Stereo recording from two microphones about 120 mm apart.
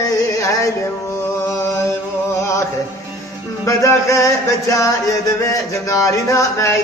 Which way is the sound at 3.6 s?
25° left (ahead or behind).